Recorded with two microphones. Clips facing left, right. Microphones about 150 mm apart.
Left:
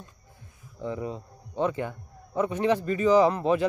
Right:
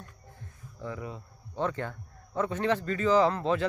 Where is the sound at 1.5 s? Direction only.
15° left (ahead or behind).